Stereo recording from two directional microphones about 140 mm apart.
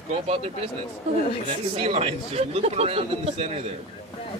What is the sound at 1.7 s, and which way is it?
Speech, 45° right (ahead or behind).